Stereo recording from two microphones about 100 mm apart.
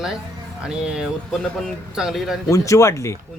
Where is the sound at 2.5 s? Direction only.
30° left (ahead or behind).